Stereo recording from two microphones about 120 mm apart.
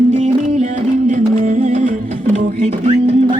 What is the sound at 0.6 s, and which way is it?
Music, 90° right.